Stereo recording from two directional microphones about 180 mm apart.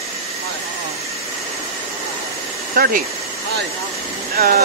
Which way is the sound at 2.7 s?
55° right (ahead or behind).